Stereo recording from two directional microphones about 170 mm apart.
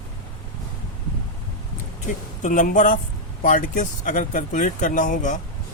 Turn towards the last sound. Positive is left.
turn(degrees=45)  # may be behind; listen again after turning